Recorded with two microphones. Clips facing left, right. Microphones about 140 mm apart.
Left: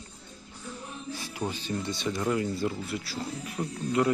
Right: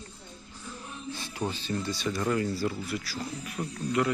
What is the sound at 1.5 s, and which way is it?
Speech, 15° left (ahead or behind).